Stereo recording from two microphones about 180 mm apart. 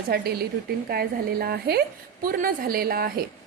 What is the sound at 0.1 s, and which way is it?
A woman's voice, 60° right (ahead or behind).